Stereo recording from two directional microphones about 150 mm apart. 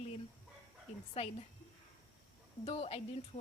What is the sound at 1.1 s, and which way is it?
Speech, 45° left (ahead or behind).